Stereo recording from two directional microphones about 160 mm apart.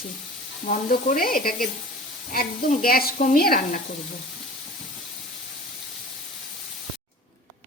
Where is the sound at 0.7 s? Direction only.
60° left (ahead or behind).